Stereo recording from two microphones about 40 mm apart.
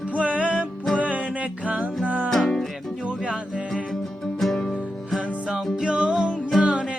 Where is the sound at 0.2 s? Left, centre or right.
Right.